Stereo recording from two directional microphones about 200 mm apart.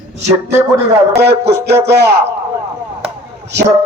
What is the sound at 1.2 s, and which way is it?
Speech, 55° right (ahead or behind).